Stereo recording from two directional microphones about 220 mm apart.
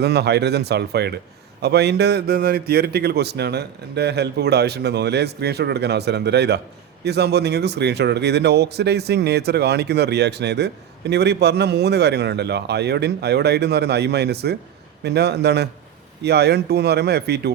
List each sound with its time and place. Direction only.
0.0 s a man's voice: 50° right (ahead or behind)